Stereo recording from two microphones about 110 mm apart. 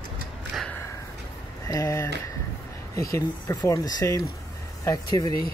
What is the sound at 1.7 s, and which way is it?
Speech, 30° left (ahead or behind).